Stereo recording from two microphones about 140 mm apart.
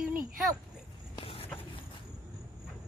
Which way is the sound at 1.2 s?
40° left (ahead or behind).